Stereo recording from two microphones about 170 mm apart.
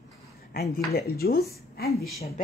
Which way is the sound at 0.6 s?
65° left (ahead or behind).